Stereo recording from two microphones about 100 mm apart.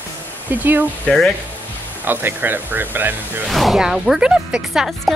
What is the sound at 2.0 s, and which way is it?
Speech, 20° right (ahead or behind).